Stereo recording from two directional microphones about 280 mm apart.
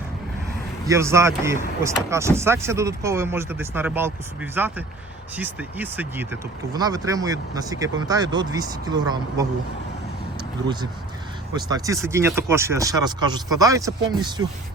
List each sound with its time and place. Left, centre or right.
0.9 s speech: centre
11.5 s speech: centre